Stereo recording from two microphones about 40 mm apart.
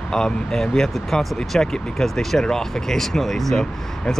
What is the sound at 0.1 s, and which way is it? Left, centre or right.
Speech, centre.